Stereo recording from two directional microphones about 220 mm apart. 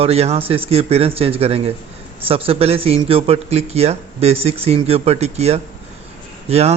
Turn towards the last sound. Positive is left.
turn(degrees=-30)  # may be behind; listen again after turning